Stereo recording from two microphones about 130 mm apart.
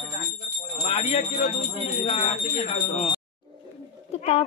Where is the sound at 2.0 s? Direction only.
50° left (ahead or behind).